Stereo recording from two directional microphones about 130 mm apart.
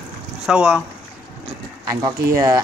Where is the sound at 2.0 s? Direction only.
25° right (ahead or behind).